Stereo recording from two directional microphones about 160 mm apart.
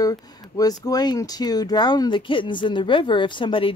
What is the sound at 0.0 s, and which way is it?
Speech, 20° left (ahead or behind).